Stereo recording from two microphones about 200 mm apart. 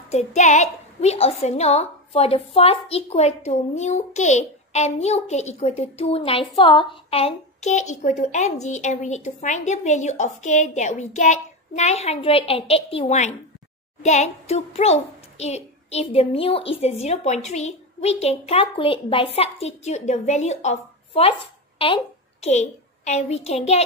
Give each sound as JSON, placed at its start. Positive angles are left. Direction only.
{"t": 0.1, "sound": "a child's voice", "side_deg": 35}